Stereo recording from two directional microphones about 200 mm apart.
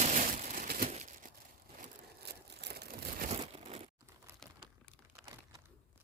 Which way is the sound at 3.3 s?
30° right (ahead or behind).